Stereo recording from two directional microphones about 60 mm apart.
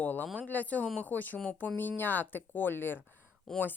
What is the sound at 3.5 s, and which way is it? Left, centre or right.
Speech, centre.